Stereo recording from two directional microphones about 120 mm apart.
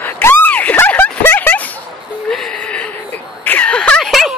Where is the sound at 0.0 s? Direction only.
15° left (ahead or behind).